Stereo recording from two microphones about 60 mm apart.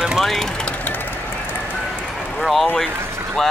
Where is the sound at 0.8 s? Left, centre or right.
Left.